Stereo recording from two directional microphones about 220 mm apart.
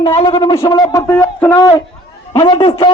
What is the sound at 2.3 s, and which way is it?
Shofar, 20° left (ahead or behind).